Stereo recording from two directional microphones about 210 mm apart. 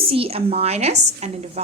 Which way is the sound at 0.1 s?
25° right (ahead or behind).